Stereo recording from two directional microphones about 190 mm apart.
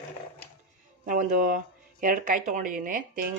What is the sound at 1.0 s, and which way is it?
Speech, 45° right (ahead or behind).